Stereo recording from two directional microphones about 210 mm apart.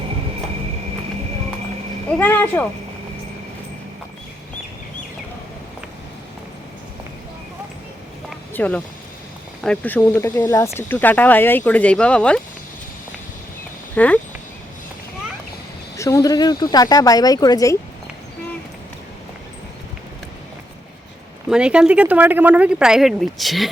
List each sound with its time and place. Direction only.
2.1 s speech: 10° left (ahead or behind)
8.5 s speech: 10° left (ahead or behind)
13.9 s speech: 5° left (ahead or behind)
16.0 s speech: 15° left (ahead or behind)
21.5 s speech: 5° right (ahead or behind)